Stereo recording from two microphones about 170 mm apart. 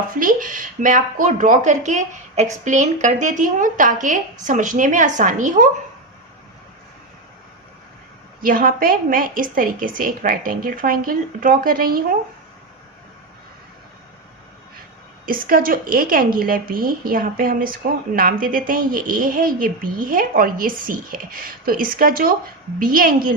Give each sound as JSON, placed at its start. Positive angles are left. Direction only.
{"t": 0.2, "sound": "speech", "side_deg": -55}
{"t": 8.4, "sound": "a woman's voice", "side_deg": -55}
{"t": 15.3, "sound": "a woman's voice", "side_deg": -55}